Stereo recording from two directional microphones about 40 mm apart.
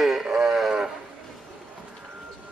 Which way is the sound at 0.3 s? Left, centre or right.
Centre.